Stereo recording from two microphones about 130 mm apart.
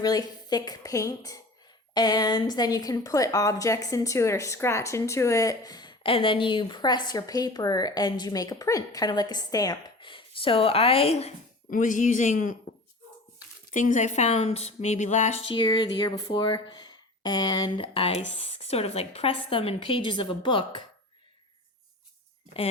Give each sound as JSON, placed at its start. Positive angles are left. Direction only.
{"t": 0.0, "sound": "a woman's voice", "side_deg": 30}
{"t": 10.0, "sound": "speech", "side_deg": 40}
{"t": 11.7, "sound": "speech", "side_deg": 80}
{"t": 13.7, "sound": "a woman's voice", "side_deg": 75}
{"t": 15.4, "sound": "speech", "side_deg": 35}